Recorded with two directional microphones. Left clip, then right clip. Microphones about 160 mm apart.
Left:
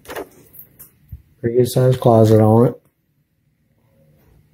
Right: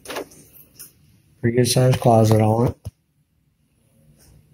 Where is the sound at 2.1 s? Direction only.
35° left (ahead or behind).